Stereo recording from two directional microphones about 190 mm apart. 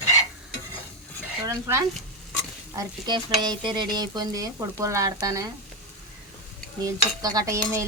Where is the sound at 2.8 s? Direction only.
20° right (ahead or behind).